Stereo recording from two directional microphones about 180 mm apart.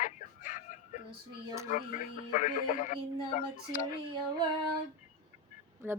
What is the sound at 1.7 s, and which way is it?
Speech, 45° left (ahead or behind).